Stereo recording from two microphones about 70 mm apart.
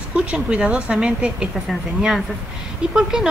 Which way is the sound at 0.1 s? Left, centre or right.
Centre.